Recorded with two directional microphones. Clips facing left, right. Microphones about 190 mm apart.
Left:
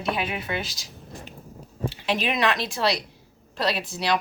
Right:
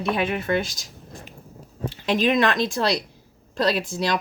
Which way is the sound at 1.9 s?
45° right (ahead or behind).